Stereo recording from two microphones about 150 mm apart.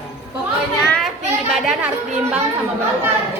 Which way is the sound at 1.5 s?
5° right (ahead or behind).